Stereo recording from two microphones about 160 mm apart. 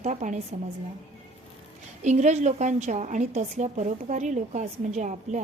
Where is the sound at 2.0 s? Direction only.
45° right (ahead or behind).